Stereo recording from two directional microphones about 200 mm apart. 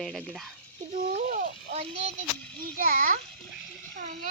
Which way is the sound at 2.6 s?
40° right (ahead or behind).